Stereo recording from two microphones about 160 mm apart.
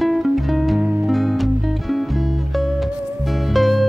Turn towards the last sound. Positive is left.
turn(degrees=0)  # may be behind; listen again after turning